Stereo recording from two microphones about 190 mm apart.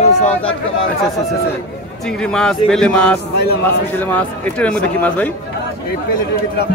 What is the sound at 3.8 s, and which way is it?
Speech, 10° left (ahead or behind).